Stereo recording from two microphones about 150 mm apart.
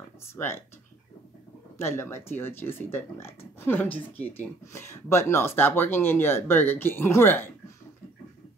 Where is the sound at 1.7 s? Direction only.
15° left (ahead or behind).